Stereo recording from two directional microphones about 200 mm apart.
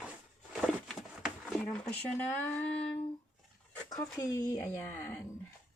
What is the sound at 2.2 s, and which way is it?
Speech, 10° left (ahead or behind).